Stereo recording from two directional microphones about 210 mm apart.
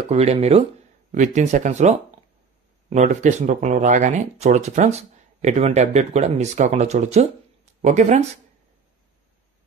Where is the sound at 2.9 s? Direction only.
35° right (ahead or behind).